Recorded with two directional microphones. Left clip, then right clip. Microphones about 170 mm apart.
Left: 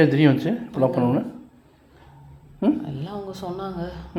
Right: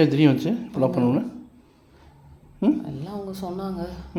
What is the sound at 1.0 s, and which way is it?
Speech, 15° right (ahead or behind).